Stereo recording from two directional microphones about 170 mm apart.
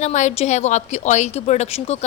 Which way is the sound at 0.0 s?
45° left (ahead or behind).